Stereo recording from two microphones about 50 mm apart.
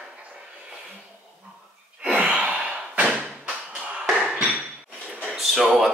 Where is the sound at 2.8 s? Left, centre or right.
Right.